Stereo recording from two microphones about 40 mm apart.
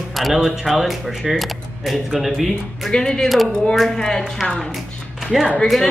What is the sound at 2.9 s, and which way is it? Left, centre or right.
Speech, centre.